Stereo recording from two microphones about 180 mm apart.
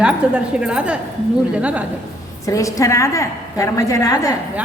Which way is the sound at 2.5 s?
20° left (ahead or behind).